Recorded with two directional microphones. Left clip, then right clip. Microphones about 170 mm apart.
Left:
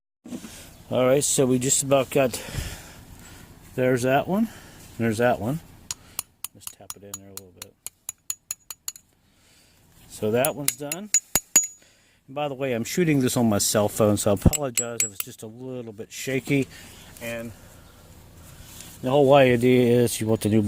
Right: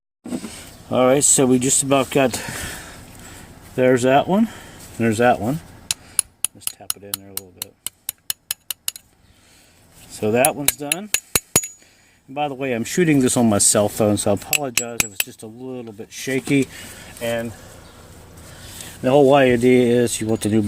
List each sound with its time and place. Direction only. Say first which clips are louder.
0.3 s a sound: right 9 dB; 20° left (ahead or behind)
0.9 s speech: right 5 dB; 40° left (ahead or behind)
10.1 s speech: right 5 dB; 35° left (ahead or behind)
12.3 s speech: right 4 dB; 35° left (ahead or behind)
17.2 s speech: right 9 dB; 5° right (ahead or behind)
19.0 s speech: right 6 dB; 25° left (ahead or behind)
19.3 s speech: right 3 dB; 45° left (ahead or behind)